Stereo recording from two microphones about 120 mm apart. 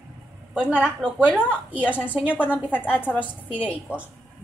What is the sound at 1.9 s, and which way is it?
Speech, 10° right (ahead or behind).